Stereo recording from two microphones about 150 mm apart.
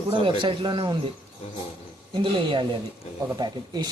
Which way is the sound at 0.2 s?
35° right (ahead or behind).